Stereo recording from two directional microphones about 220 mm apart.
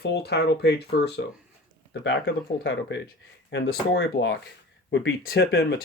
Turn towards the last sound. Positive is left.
turn(degrees=45)  # may be behind; listen again after turning